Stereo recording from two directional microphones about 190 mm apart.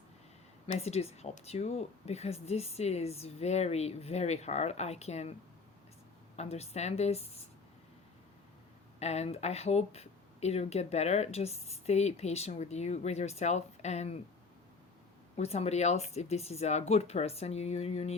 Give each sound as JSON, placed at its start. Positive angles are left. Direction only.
{"t": 0.7, "sound": "speech", "side_deg": 35}
{"t": 6.3, "sound": "speech", "side_deg": 35}
{"t": 9.0, "sound": "speech", "side_deg": 35}
{"t": 15.4, "sound": "speech", "side_deg": 35}